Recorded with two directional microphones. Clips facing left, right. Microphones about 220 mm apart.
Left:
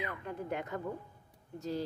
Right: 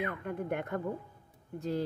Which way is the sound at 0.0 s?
55° right (ahead or behind).